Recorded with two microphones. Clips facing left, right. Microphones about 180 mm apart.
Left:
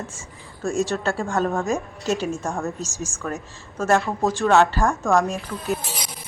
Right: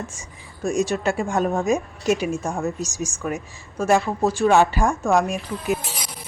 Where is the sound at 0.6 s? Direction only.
15° right (ahead or behind).